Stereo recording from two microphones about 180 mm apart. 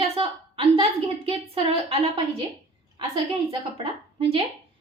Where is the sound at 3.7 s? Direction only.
30° right (ahead or behind).